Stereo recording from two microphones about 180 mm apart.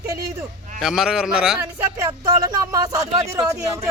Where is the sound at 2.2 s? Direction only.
20° right (ahead or behind).